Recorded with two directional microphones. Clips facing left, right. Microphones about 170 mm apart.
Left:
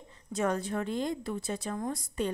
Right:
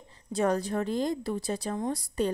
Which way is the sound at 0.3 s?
35° right (ahead or behind).